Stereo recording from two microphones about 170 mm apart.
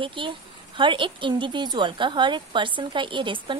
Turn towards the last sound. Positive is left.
turn(degrees=-30)  # may be behind; listen again after turning